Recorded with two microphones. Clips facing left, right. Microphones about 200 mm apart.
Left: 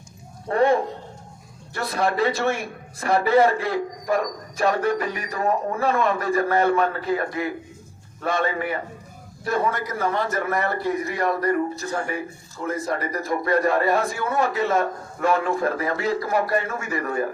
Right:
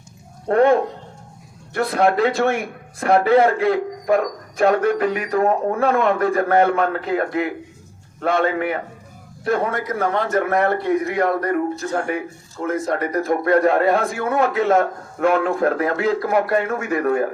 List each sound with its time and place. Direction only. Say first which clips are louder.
0.4 s a man's voice: right 4 dB; 60° right (ahead or behind)